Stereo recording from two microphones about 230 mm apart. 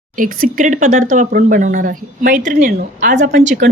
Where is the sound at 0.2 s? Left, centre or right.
Right.